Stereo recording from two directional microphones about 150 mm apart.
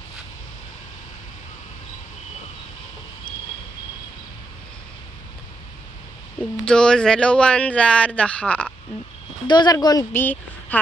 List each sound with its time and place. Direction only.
6.6 s speech: 5° left (ahead or behind)
9.5 s speech: 25° left (ahead or behind)
10.1 s speech: 10° left (ahead or behind)